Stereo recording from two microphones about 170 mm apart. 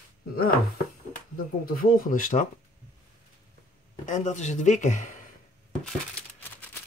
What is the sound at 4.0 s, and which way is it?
Speech, 50° left (ahead or behind).